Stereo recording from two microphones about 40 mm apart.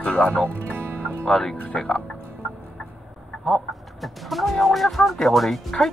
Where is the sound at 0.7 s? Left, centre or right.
Right.